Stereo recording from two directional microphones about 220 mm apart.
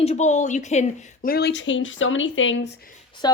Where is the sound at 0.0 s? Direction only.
30° left (ahead or behind); by 2.7 s 60° left (ahead or behind).